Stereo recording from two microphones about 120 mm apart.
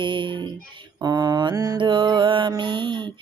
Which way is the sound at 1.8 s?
40° right (ahead or behind).